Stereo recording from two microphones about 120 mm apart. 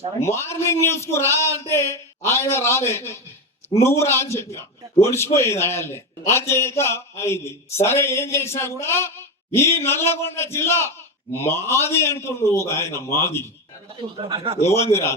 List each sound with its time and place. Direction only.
0.2 s a man's voice: 20° left (ahead or behind)
14.0 s speech: 40° right (ahead or behind)
14.7 s a man's voice: 20° left (ahead or behind)